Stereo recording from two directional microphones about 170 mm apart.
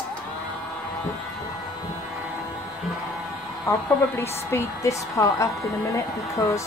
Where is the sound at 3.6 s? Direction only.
15° left (ahead or behind).